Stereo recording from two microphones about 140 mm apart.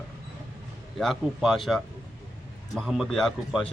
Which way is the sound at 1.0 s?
Centre (ahead or behind).